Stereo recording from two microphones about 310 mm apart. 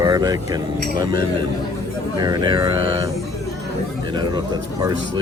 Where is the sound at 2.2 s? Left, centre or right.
Centre.